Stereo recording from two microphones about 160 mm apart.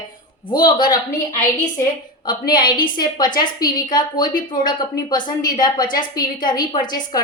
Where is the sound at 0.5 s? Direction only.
25° left (ahead or behind).